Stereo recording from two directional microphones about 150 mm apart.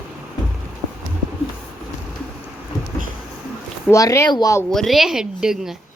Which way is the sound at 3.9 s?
20° left (ahead or behind).